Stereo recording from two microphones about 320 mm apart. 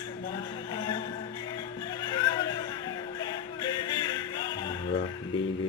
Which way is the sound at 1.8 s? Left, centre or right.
Centre.